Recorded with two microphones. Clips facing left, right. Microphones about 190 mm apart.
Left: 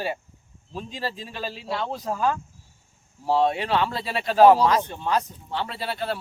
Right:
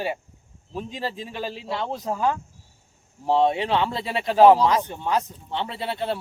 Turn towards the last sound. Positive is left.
turn(degrees=-20)  # may be behind; listen again after turning